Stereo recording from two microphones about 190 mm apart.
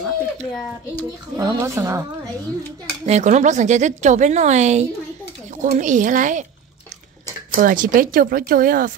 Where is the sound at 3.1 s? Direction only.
40° right (ahead or behind).